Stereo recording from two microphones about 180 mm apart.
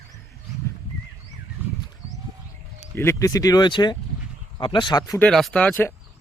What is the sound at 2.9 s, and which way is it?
Speech, 15° left (ahead or behind).